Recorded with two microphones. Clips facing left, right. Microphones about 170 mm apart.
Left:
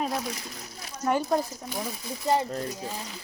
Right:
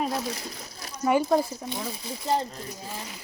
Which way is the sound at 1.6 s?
25° right (ahead or behind).